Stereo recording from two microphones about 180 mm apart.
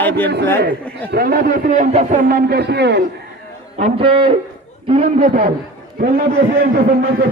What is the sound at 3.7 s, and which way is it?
A man's voice, 35° right (ahead or behind).